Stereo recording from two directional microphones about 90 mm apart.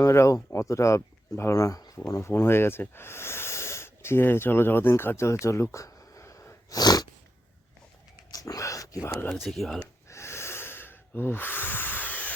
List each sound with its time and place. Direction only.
0.0 s speech: 35° left (ahead or behind)
5.7 s a sound: 35° left (ahead or behind)
8.3 s whispering: 45° left (ahead or behind)
9.4 s speech: centre (ahead or behind)
10.1 s snort: 30° left (ahead or behind)